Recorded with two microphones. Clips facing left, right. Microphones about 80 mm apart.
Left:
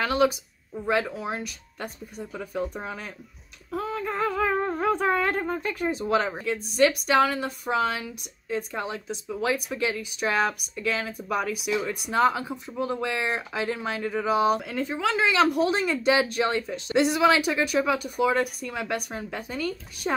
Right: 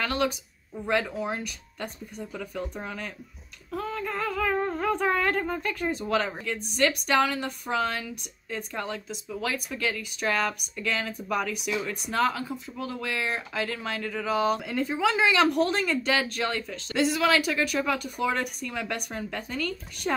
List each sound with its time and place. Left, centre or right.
0.0 s speech: centre
3.7 s a sound: centre
4.1 s humming: left
5.0 s speech: centre
14.6 s speech: centre